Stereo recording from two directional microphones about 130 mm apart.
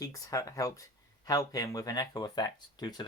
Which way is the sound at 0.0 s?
25° left (ahead or behind).